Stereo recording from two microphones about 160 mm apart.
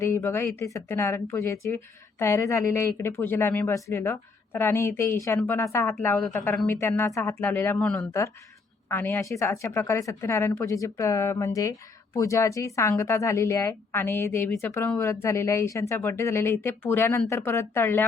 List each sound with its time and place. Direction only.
0.0 s a woman's voice: 15° left (ahead or behind)